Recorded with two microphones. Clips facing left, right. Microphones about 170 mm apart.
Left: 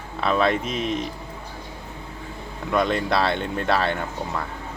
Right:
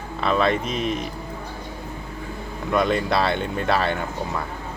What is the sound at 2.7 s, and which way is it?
Speech, centre (ahead or behind).